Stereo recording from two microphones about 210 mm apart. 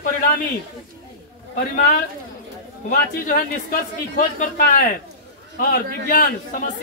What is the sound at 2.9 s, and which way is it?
Speech, 40° left (ahead or behind).